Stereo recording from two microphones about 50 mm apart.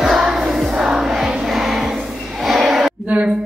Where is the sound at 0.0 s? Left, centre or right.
Centre.